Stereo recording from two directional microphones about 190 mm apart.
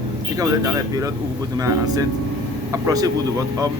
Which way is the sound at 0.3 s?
15° right (ahead or behind).